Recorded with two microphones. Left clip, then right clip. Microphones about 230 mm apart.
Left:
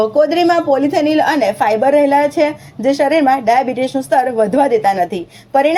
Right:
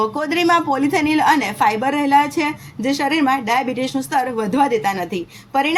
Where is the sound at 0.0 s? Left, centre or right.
Centre.